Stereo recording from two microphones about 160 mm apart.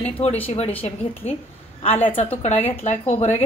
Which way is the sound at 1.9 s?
10° left (ahead or behind).